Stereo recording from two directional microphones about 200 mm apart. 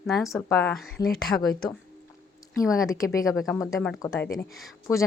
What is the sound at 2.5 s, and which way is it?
Speech, 15° left (ahead or behind).